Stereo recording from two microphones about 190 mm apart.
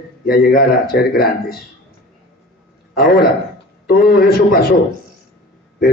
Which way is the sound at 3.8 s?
55° left (ahead or behind).